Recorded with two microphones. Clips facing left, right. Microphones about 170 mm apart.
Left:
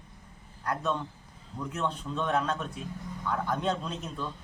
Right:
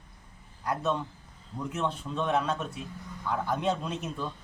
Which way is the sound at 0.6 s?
5° right (ahead or behind).